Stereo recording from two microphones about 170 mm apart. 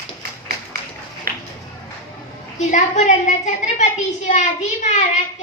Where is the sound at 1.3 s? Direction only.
60° right (ahead or behind).